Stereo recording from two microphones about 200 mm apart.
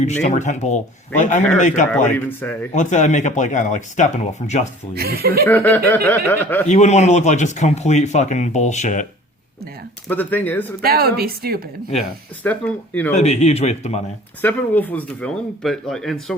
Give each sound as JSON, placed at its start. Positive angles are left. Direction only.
{"t": 0.0, "sound": "speech", "side_deg": 35}
{"t": 2.1, "sound": "speech", "side_deg": 10}
{"t": 2.7, "sound": "speech", "side_deg": 35}
{"t": 4.9, "sound": "a woman's voice", "side_deg": -50}
{"t": 5.5, "sound": "speech", "side_deg": 10}
{"t": 6.7, "sound": "speech", "side_deg": 35}
{"t": 10.1, "sound": "speech", "side_deg": 10}
{"t": 10.8, "sound": "a woman's voice", "side_deg": -50}
{"t": 11.9, "sound": "speech", "side_deg": 5}
{"t": 13.1, "sound": "speech", "side_deg": 35}
{"t": 14.4, "sound": "speech", "side_deg": 10}